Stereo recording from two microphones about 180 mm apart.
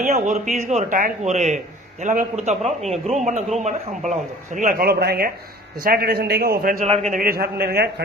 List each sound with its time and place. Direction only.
0.0 s a man's voice: 40° right (ahead or behind)
6.8 s a man's voice: 35° right (ahead or behind)
7.2 s a man's voice: 55° right (ahead or behind)